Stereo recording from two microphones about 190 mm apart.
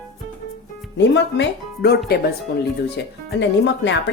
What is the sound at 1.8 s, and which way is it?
Speech, 55° left (ahead or behind).